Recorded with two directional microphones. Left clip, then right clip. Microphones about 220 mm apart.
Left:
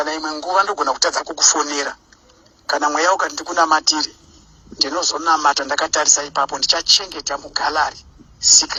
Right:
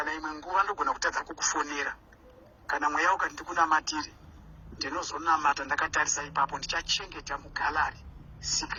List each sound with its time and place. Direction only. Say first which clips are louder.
0.0 s speech: left 11 dB; 45° left (ahead or behind)